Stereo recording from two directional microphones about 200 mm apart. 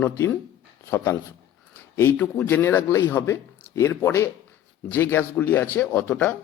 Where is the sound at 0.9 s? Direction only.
15° left (ahead or behind).